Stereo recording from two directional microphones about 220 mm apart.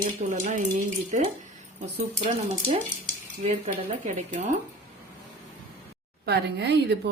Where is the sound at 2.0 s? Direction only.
25° right (ahead or behind).